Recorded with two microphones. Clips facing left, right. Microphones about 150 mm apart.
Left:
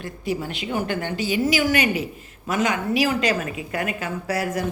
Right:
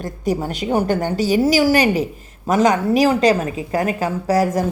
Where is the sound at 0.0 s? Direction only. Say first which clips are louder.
Right 6 dB; 45° right (ahead or behind).